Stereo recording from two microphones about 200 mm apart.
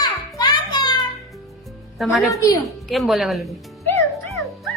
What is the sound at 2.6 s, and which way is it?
Speech, centre (ahead or behind).